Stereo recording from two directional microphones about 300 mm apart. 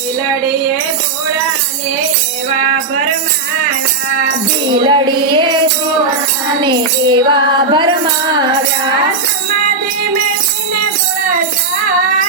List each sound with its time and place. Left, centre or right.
4.7 s music: centre
6.6 s music: centre